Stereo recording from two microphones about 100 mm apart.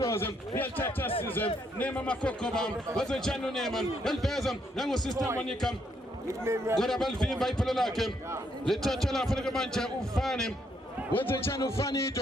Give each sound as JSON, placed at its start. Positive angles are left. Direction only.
{"t": 0.0, "sound": "a man's voice", "side_deg": 25}
{"t": 6.2, "sound": "speech", "side_deg": -25}
{"t": 6.7, "sound": "a man's voice", "side_deg": 5}
{"t": 11.1, "sound": "speech", "side_deg": 20}